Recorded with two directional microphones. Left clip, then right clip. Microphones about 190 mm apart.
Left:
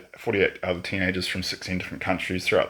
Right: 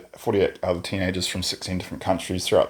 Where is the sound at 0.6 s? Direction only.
45° right (ahead or behind).